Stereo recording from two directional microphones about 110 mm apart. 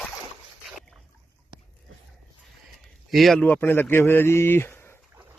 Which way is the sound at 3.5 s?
20° left (ahead or behind).